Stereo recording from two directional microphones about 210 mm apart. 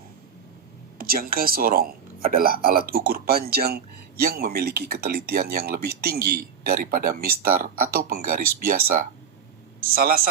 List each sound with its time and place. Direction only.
0.9 s speech: 45° right (ahead or behind)